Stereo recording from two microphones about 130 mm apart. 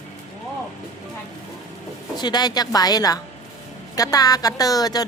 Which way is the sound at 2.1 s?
30° left (ahead or behind).